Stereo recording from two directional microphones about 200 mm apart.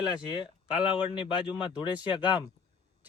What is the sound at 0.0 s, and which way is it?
Speech, 20° left (ahead or behind).